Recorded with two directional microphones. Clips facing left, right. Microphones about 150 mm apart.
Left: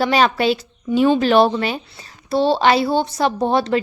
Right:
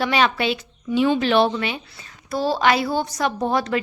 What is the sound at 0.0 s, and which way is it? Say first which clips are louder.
A woman's voice: left 4 dB; 40° left (ahead or behind).